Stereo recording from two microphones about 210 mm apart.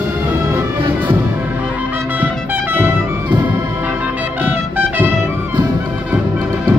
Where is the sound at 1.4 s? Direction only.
10° right (ahead or behind).